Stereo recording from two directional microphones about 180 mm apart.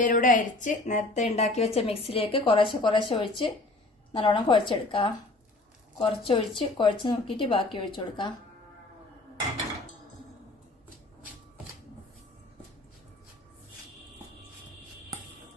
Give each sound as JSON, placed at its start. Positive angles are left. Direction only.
{"t": 0.0, "sound": "a woman's voice", "side_deg": 45}